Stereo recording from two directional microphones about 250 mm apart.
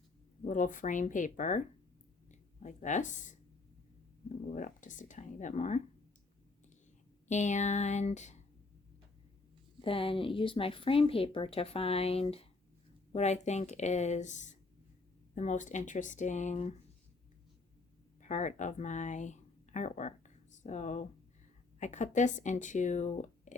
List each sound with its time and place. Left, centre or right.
0.4 s speech: left
7.3 s speech: left
9.8 s speech: left
18.2 s speech: left